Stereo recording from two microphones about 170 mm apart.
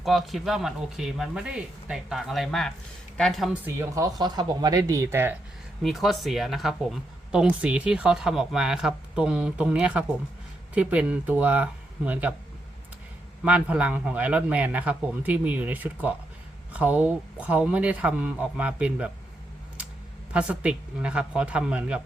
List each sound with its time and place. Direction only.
0.0 s a man's voice: centre (ahead or behind)
5.8 s a man's voice: centre (ahead or behind)
13.4 s a man's voice: 10° right (ahead or behind)
20.3 s a man's voice: 10° right (ahead or behind)